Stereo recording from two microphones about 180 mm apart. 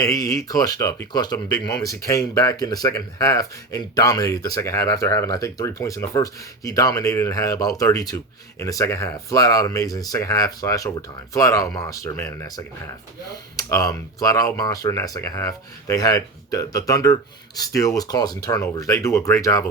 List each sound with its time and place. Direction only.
0.0 s speech: 20° left (ahead or behind)